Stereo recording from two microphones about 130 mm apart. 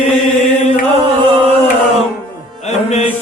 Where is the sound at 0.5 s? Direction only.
60° left (ahead or behind).